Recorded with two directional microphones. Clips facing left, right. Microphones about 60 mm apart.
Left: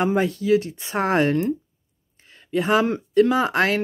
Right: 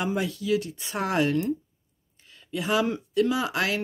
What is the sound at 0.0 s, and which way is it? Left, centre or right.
Speech, left.